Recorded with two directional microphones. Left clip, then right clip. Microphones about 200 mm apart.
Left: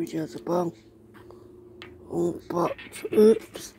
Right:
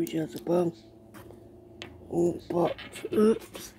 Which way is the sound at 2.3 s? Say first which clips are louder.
Left 1 dB; 25° left (ahead or behind).